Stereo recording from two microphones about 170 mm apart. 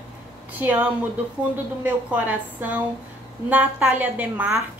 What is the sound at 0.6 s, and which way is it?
A woman's voice, 10° right (ahead or behind).